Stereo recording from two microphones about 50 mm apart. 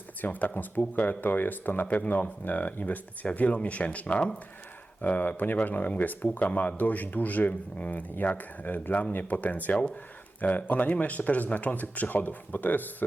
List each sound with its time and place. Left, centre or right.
0.2 s speech: left